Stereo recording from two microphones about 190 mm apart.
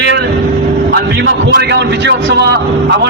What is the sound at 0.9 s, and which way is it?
A man's voice, 60° right (ahead or behind).